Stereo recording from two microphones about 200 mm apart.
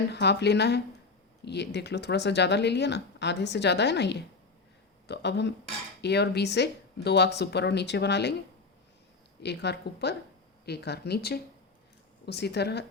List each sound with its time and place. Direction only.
0.1 s speech: 55° left (ahead or behind)
9.4 s speech: 55° left (ahead or behind)